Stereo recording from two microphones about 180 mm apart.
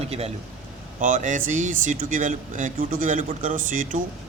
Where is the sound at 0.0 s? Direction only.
35° right (ahead or behind).